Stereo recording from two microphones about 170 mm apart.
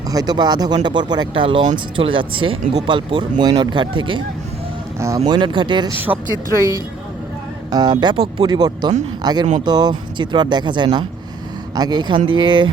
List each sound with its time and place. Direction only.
0.1 s speech: 20° right (ahead or behind)
4.9 s speech: 20° right (ahead or behind)
6.1 s speech: 10° right (ahead or behind)
7.7 s speech: 25° right (ahead or behind)